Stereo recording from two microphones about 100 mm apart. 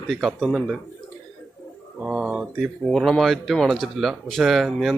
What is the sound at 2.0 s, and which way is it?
Mantra, 10° right (ahead or behind).